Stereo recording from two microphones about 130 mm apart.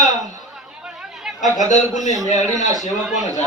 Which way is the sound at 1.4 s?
65° left (ahead or behind).